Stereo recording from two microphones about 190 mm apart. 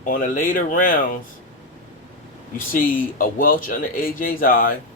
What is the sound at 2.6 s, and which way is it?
Speech, 45° left (ahead or behind).